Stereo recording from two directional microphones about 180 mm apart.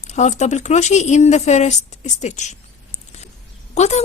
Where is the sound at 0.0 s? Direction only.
40° left (ahead or behind).